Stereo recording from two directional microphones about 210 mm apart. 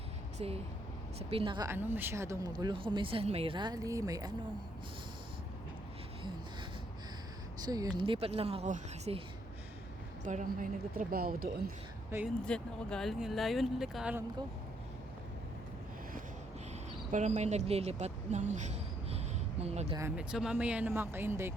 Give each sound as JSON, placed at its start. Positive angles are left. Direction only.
{"t": 0.3, "sound": "speech", "side_deg": -30}
{"t": 7.6, "sound": "speech", "side_deg": -20}
{"t": 10.2, "sound": "speech", "side_deg": -40}
{"t": 12.1, "sound": "speech", "side_deg": -15}
{"t": 12.5, "sound": "speech", "side_deg": 5}
{"t": 17.1, "sound": "speech", "side_deg": -35}
{"t": 20.0, "sound": "speech", "side_deg": -10}